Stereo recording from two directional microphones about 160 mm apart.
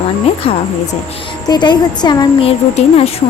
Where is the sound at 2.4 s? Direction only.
40° left (ahead or behind).